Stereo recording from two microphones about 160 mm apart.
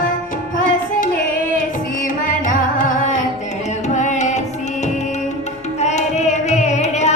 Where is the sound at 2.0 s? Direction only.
55° left (ahead or behind).